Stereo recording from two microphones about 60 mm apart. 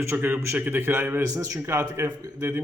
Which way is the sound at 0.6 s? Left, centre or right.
Right.